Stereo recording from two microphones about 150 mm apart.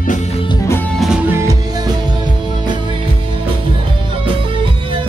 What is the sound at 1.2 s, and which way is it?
Music, 20° right (ahead or behind).